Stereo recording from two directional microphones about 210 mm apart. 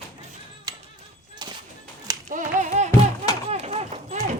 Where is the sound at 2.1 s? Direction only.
15° right (ahead or behind).